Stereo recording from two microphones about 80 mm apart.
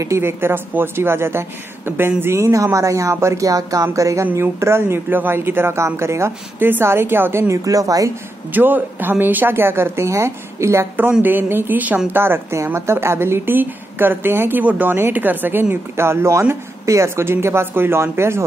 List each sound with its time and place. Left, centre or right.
0.0 s a woman's voice: right
8.5 s speech: right
11.0 s a woman's voice: right